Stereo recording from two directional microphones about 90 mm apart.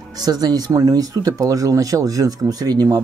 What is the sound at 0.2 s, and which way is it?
Speech, 45° right (ahead or behind).